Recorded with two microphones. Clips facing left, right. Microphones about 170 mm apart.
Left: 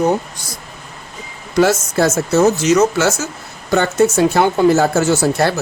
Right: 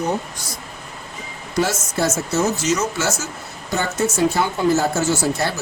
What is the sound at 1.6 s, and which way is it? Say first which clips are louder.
Speech: left 7 dB; 70° left (ahead or behind).